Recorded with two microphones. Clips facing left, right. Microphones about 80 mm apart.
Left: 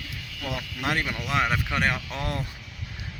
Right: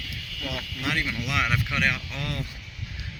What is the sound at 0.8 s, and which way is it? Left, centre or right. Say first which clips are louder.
Speech: left 1 dB; left.